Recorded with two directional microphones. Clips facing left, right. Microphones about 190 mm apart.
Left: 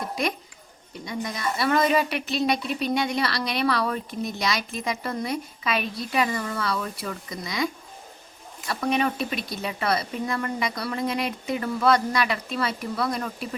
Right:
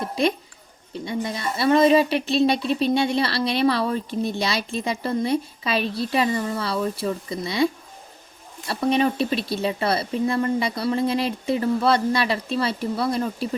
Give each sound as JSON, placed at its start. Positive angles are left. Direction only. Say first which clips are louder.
{"t": 0.0, "sound": "music", "louder": "right 5 dB", "side_deg": -25}
{"t": 1.0, "sound": "a woman's voice", "louder": "right 2 dB", "side_deg": -30}